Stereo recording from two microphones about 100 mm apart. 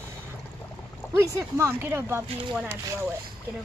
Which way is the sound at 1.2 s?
30° right (ahead or behind).